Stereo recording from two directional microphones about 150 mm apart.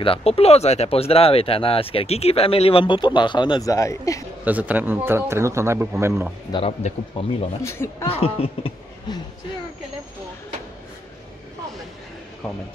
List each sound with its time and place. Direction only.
0.0 s speech: 40° left (ahead or behind); by 4.2 s 20° left (ahead or behind)
4.5 s a man's voice: 10° right (ahead or behind)
6.8 s speech: 40° left (ahead or behind)
7.6 s speech: 20° left (ahead or behind)
8.1 s speech: 40° left (ahead or behind)